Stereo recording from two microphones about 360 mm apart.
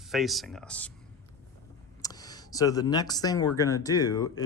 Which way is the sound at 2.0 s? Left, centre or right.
Centre.